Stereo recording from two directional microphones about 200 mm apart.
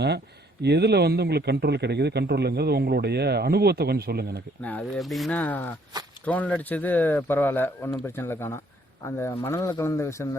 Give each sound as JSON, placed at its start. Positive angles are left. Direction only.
{"t": 0.6, "sound": "a man's voice", "side_deg": -55}
{"t": 4.6, "sound": "speech", "side_deg": 5}